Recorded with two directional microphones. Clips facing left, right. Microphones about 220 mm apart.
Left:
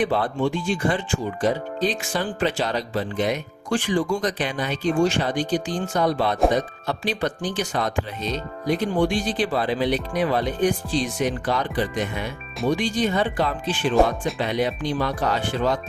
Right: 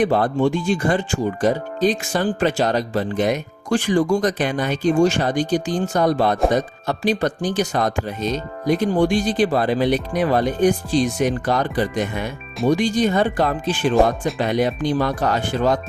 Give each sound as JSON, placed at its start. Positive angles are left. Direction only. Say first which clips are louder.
{"t": 0.0, "sound": "speech", "louder": "right 5 dB", "side_deg": -45}